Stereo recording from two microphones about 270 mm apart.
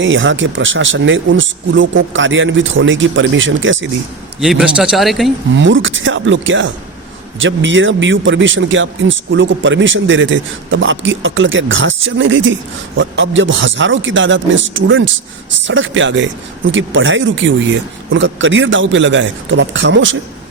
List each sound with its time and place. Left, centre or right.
0.0 s speech: right
4.4 s a man's voice: centre
5.5 s speech: right